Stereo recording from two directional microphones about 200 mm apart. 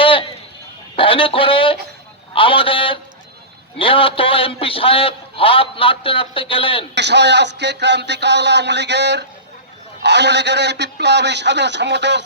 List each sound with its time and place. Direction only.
0.0 s a sound: 25° left (ahead or behind)
0.9 s a man's voice: 25° left (ahead or behind)
6.9 s a man's voice: 60° right (ahead or behind)